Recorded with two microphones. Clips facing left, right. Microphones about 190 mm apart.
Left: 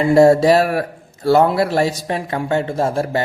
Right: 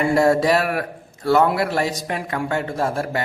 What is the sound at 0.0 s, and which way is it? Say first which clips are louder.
Speech: left 6 dB; 25° left (ahead or behind).